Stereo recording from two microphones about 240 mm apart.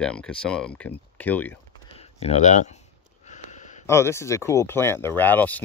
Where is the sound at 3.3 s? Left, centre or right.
Left.